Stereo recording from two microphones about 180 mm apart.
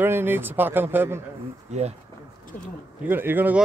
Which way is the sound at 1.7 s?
40° right (ahead or behind).